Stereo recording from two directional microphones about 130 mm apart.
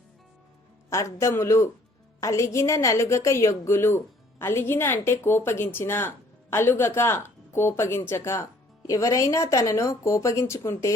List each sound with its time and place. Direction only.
0.9 s a woman's voice: 25° left (ahead or behind)